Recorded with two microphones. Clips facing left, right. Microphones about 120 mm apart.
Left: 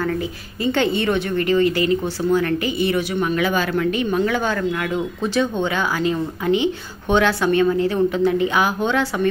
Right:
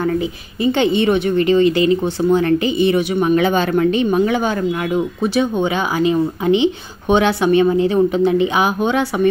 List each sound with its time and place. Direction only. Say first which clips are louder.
0.7 s speech: right 4 dB; 20° right (ahead or behind)